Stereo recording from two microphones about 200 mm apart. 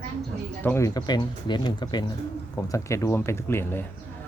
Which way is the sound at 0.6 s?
15° left (ahead or behind).